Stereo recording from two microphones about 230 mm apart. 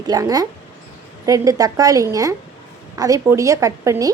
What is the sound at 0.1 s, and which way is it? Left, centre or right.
Speech, centre.